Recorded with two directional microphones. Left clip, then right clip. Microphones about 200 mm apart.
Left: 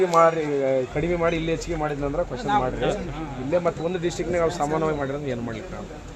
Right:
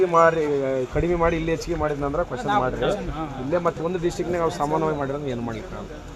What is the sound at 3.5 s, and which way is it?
Speech, 15° right (ahead or behind).